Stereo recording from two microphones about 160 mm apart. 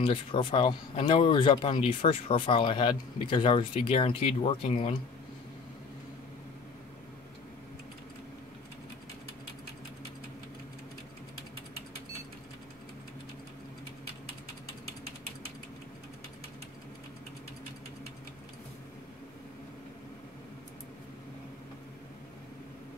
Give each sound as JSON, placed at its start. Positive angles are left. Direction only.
{"t": 0.0, "sound": "speech", "side_deg": 35}